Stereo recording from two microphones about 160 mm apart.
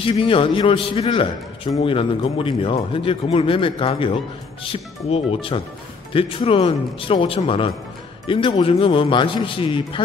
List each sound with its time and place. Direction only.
0.0 s speech: 35° left (ahead or behind)